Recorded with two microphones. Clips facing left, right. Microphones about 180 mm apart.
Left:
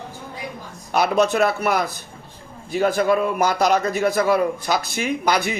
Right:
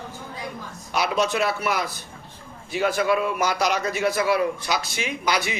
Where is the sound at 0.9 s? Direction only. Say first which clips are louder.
Left 5 dB; 50° left (ahead or behind).